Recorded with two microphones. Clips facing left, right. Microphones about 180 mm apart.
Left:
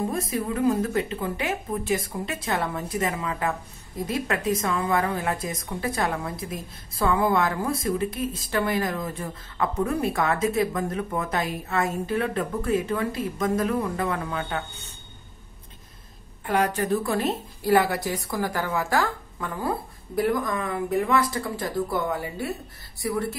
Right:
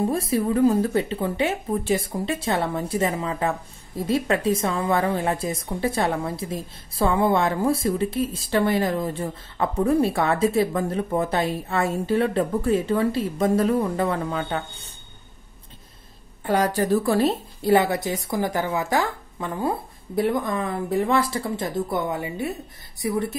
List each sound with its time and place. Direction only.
0.0 s a woman's voice: 30° right (ahead or behind)
16.4 s a woman's voice: 35° right (ahead or behind); by 23.2 s 20° right (ahead or behind)